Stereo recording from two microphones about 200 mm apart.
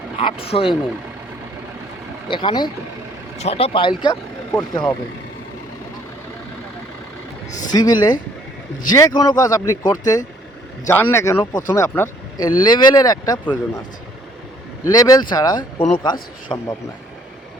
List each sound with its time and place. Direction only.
0.2 s speech: 25° left (ahead or behind)
2.2 s speech: 25° left (ahead or behind)
7.7 s speech: 20° left (ahead or behind)
14.8 s speech: 20° left (ahead or behind)
16.5 s speech: 15° left (ahead or behind)